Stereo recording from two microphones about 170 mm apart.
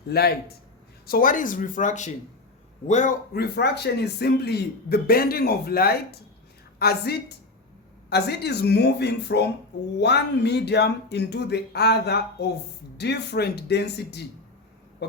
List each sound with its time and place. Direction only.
0.1 s speech: 70° left (ahead or behind)
1.0 s speech: 55° left (ahead or behind)
3.3 s a woman's voice: 70° left (ahead or behind)